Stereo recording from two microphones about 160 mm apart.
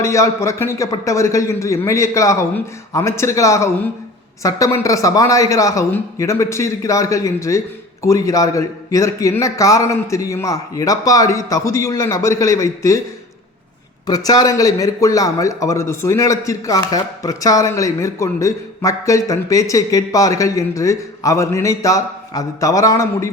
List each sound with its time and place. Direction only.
0.0 s speech: 20° left (ahead or behind)
14.1 s speech: 25° left (ahead or behind)